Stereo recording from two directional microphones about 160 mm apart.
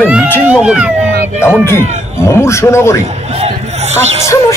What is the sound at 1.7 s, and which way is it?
A man's voice, 15° left (ahead or behind).